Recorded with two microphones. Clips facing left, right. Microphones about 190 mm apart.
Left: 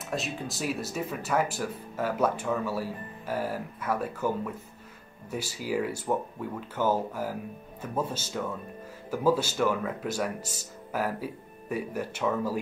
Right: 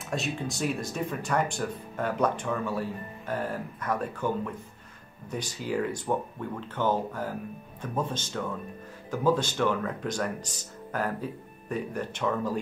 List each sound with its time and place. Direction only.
0.1 s speech: centre (ahead or behind)